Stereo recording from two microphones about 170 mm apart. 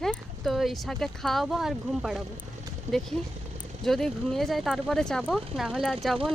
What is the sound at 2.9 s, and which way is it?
Speech, 40° right (ahead or behind).